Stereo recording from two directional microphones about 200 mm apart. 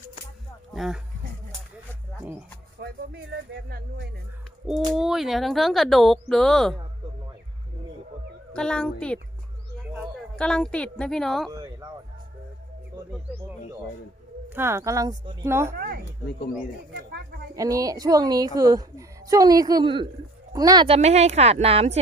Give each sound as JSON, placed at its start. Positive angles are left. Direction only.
{"t": 0.7, "sound": "speech", "side_deg": 0}
{"t": 2.8, "sound": "speech", "side_deg": -55}
{"t": 4.9, "sound": "speech", "side_deg": 0}
{"t": 8.5, "sound": "speech", "side_deg": 5}
{"t": 10.3, "sound": "speech", "side_deg": 5}
{"t": 11.5, "sound": "a sound", "side_deg": -15}
{"t": 14.5, "sound": "speech", "side_deg": -10}
{"t": 15.7, "sound": "speech", "side_deg": -50}
{"t": 16.9, "sound": "a sound", "side_deg": -55}
{"t": 17.5, "sound": "a woman's voice", "side_deg": -15}